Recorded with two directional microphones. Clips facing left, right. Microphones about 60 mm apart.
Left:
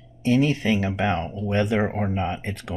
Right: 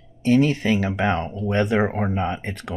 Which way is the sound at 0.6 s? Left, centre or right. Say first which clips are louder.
Right 2 dB; right.